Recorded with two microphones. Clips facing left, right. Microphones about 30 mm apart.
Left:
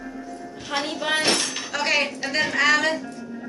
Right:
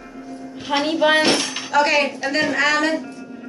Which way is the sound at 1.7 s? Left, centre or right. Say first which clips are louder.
Right 7 dB; centre.